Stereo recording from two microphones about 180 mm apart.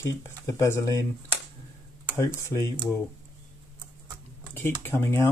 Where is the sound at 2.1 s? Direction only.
15° left (ahead or behind).